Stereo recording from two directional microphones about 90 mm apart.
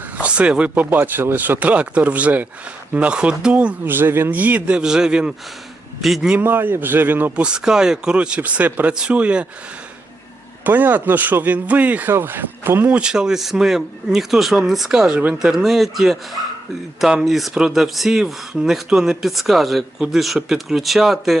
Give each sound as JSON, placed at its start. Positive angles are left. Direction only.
{"t": 0.2, "sound": "speech", "side_deg": -15}
{"t": 6.3, "sound": "speech", "side_deg": -20}
{"t": 7.4, "sound": "speech", "side_deg": -10}
{"t": 10.6, "sound": "speech", "side_deg": -20}
{"t": 13.0, "sound": "speech", "side_deg": -10}